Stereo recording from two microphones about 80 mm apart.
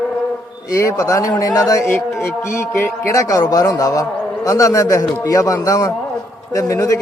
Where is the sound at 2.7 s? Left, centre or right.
Left.